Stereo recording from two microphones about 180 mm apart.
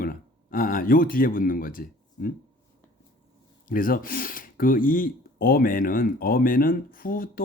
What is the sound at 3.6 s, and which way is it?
Speech, 50° left (ahead or behind).